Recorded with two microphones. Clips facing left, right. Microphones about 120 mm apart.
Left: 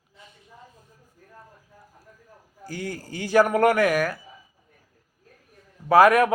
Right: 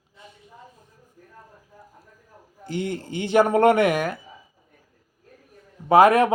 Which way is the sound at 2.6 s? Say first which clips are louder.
Right 5 dB; 25° right (ahead or behind).